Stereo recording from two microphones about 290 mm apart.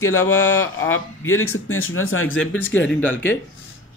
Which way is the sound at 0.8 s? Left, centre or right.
Left.